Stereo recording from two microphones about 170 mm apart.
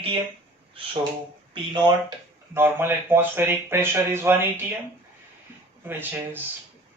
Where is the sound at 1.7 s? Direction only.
25° right (ahead or behind).